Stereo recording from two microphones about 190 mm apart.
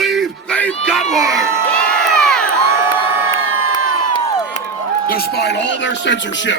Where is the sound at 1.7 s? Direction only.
5° left (ahead or behind).